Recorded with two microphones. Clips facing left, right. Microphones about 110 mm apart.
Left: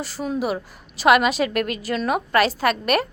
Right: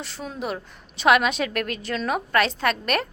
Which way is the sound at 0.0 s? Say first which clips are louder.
Left 6 dB; 5° left (ahead or behind).